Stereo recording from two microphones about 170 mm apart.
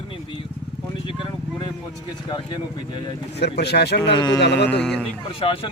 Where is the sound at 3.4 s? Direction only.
75° left (ahead or behind).